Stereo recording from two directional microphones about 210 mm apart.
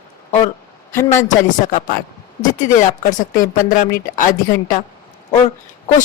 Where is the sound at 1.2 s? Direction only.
35° left (ahead or behind).